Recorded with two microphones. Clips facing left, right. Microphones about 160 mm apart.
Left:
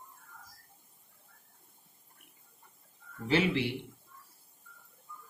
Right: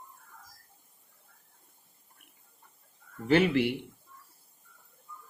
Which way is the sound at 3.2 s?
55° right (ahead or behind).